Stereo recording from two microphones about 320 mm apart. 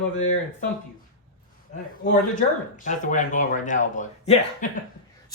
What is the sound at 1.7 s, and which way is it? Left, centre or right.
A man's voice, left.